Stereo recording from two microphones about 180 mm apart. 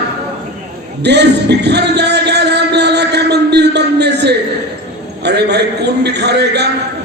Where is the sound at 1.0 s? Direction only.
70° right (ahead or behind).